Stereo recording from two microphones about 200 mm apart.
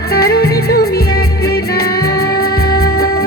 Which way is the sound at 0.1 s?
50° left (ahead or behind).